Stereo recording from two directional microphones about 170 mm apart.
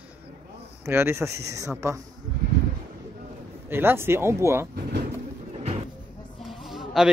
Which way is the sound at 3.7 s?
15° right (ahead or behind).